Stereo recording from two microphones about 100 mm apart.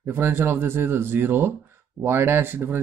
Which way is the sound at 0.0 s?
25° right (ahead or behind).